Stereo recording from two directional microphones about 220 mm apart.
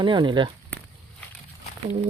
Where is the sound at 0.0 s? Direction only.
20° right (ahead or behind).